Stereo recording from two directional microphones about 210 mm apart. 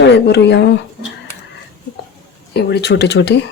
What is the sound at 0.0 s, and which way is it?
Speech, 55° left (ahead or behind).